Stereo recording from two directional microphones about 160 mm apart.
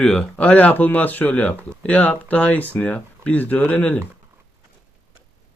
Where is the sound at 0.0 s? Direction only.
5° left (ahead or behind).